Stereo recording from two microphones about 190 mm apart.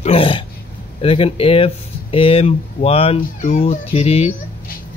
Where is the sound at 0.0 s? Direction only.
30° left (ahead or behind).